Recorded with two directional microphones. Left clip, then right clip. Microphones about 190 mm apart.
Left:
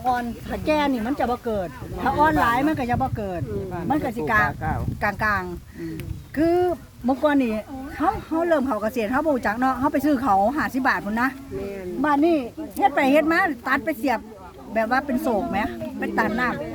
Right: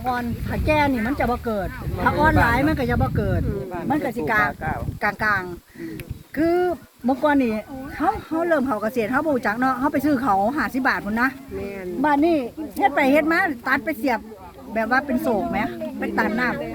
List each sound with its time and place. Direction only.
0.0 s speech: 30° left (ahead or behind); by 4.1 s 15° left (ahead or behind)
4.4 s speech: 35° right (ahead or behind)
4.9 s speech: 20° left (ahead or behind)